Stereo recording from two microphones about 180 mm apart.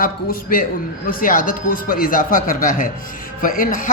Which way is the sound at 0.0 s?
50° left (ahead or behind).